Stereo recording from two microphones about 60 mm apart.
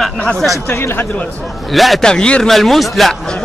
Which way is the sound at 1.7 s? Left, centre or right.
Centre.